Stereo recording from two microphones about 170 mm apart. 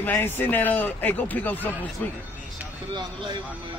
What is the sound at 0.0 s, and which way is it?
A man's voice, 10° left (ahead or behind).